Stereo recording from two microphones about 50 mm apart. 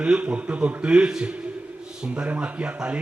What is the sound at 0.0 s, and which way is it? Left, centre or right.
Mantra, right.